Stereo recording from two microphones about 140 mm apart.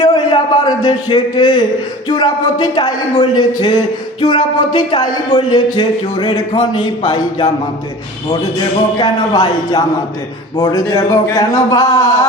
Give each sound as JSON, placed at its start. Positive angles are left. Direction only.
{"t": 0.0, "sound": "a man's voice", "side_deg": 30}
{"t": 9.0, "sound": "speech", "side_deg": 30}